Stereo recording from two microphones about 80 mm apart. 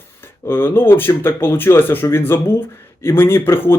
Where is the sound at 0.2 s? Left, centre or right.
Left.